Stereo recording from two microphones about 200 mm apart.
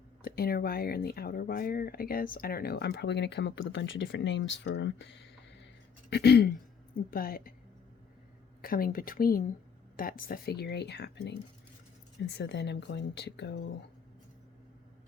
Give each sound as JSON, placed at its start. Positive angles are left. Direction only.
{"t": 0.2, "sound": "speech", "side_deg": 50}
{"t": 8.6, "sound": "speech", "side_deg": 45}